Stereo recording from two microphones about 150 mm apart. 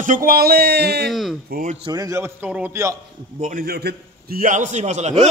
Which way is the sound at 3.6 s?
90° right.